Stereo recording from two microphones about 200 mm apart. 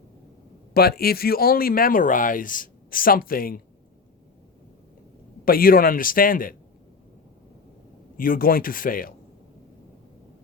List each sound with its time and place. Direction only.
0.7 s speech: 50° left (ahead or behind)
5.5 s speech: 45° left (ahead or behind)
8.1 s speech: 45° left (ahead or behind)